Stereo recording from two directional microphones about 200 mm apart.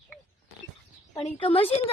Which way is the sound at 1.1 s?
25° left (ahead or behind).